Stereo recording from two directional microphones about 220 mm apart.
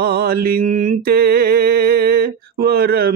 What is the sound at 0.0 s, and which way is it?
Mantra, 45° right (ahead or behind).